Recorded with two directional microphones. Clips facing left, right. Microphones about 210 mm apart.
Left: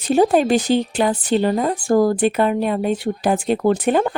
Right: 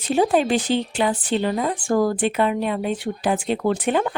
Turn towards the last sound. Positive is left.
turn(degrees=40)  # may be behind; listen again after turning